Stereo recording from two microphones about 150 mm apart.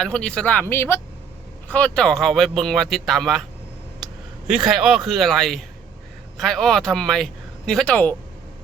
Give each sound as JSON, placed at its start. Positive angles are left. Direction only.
{"t": 0.0, "sound": "speech", "side_deg": 5}